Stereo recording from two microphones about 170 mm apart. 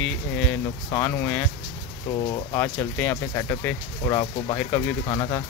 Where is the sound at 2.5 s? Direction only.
15° left (ahead or behind).